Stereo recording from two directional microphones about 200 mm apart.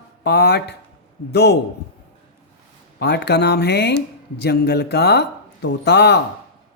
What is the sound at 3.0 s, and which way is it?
Speech, 55° left (ahead or behind).